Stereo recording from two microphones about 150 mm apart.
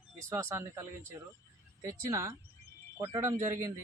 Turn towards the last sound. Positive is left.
turn(degrees=-15)  # may be behind; listen again after turning